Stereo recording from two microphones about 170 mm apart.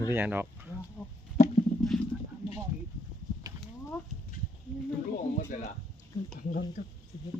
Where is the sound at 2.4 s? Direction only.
35° left (ahead or behind).